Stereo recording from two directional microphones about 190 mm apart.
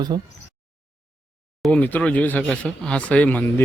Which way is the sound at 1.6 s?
5° left (ahead or behind).